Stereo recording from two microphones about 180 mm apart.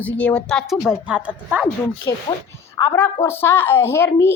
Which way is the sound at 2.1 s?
15° left (ahead or behind).